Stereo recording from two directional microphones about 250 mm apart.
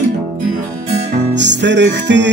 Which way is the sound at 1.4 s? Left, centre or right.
Right.